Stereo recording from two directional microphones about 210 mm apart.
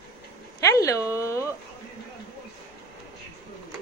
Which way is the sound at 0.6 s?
15° left (ahead or behind).